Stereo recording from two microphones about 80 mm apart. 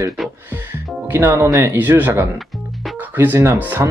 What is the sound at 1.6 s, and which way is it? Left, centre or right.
Speech, right.